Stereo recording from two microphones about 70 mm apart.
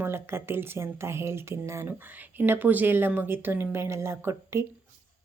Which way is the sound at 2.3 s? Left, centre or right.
Right.